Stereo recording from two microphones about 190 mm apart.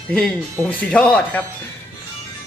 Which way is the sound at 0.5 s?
5° left (ahead or behind).